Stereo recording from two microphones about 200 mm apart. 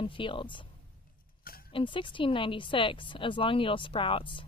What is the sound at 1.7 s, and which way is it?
Speech, 25° left (ahead or behind).